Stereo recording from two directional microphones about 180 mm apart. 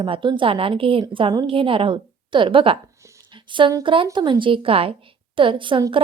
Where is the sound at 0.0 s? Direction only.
25° right (ahead or behind).